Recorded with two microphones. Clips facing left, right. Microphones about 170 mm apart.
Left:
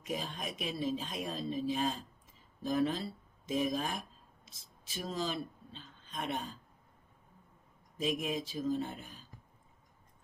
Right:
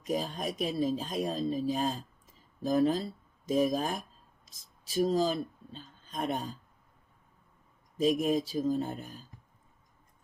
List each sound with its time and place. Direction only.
0.0 s speech: 40° right (ahead or behind)
7.9 s speech: 40° right (ahead or behind)